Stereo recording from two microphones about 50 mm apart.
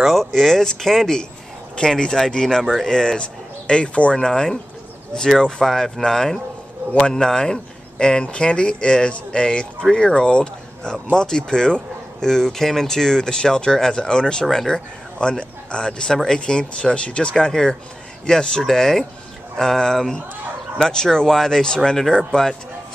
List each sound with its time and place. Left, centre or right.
0.0 s speech: centre